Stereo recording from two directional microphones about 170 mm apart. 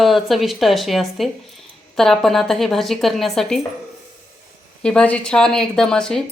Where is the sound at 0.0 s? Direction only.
Centre (ahead or behind).